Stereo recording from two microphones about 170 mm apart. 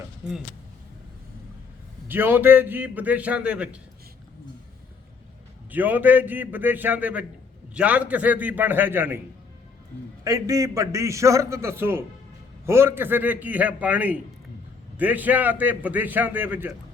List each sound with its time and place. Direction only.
2.0 s a man's voice: 10° right (ahead or behind)
5.7 s a man's voice: 10° right (ahead or behind)
10.2 s a man's voice: 20° right (ahead or behind)